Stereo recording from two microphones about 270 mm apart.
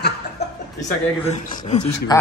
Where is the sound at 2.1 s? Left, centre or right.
Centre.